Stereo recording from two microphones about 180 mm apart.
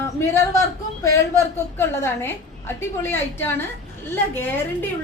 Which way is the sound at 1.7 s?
15° left (ahead or behind).